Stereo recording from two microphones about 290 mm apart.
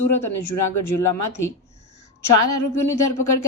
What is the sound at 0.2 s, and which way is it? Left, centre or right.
Speech, left.